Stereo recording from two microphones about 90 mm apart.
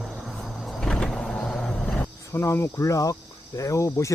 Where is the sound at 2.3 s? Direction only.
30° left (ahead or behind).